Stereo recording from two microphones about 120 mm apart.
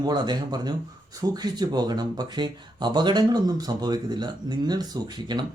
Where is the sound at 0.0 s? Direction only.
35° right (ahead or behind).